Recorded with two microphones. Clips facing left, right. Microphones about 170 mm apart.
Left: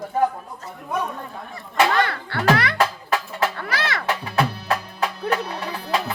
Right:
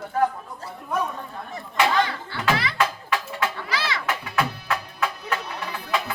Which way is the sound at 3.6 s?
60° left (ahead or behind).